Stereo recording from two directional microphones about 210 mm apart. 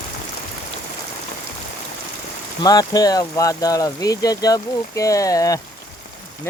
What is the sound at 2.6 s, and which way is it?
Speech, 15° left (ahead or behind).